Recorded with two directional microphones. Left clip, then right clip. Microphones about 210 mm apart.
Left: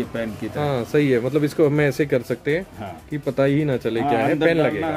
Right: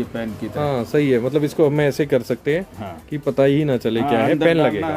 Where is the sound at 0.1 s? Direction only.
Centre (ahead or behind).